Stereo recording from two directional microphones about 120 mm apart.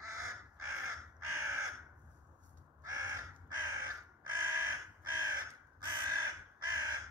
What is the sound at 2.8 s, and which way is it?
Crow, 25° right (ahead or behind).